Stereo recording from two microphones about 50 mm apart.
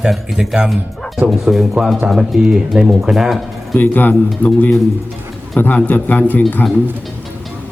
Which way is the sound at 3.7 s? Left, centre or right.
Left.